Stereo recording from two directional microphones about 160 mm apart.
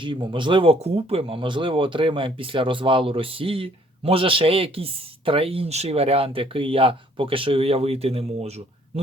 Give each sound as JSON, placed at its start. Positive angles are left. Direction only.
{"t": 0.0, "sound": "speech", "side_deg": -30}